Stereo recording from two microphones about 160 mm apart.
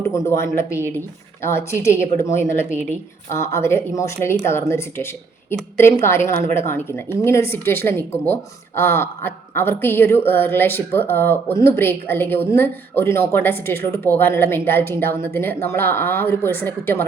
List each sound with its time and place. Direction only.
0.0 s speech: 20° left (ahead or behind)